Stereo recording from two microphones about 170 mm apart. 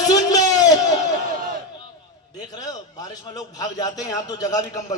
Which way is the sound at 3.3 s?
20° left (ahead or behind).